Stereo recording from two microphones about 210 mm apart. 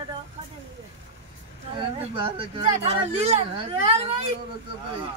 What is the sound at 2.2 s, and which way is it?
Speech, 25° right (ahead or behind).